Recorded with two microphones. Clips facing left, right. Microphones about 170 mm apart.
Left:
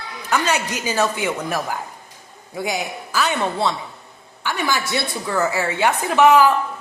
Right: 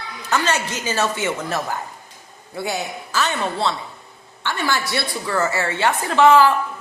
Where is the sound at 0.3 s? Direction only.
15° left (ahead or behind).